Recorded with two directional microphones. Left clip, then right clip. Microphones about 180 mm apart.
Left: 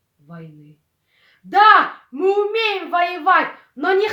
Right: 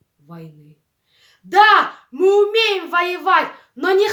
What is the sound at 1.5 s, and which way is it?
A child's voice, 20° right (ahead or behind).